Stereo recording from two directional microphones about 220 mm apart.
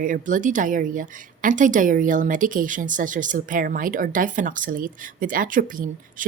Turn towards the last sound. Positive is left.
turn(degrees=-40)  # may be behind; listen again after turning